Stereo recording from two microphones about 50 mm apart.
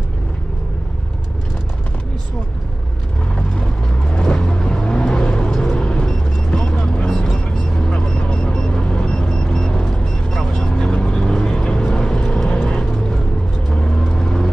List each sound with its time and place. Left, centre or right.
3.3 s vehicle: centre
7.2 s vehicle: centre
12.8 s vehicle: centre